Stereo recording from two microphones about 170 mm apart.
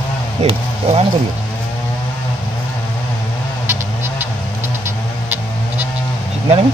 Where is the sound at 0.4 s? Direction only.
35° right (ahead or behind).